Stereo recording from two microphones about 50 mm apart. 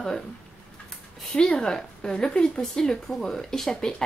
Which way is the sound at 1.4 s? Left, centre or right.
Centre.